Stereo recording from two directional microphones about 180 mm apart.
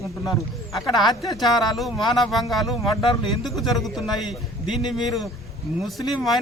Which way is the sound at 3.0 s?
25° left (ahead or behind).